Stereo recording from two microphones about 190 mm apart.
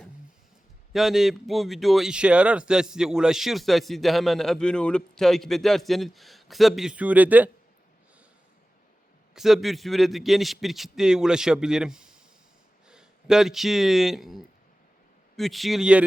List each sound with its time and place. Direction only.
0.9 s speech: centre (ahead or behind)
9.3 s speech: centre (ahead or behind)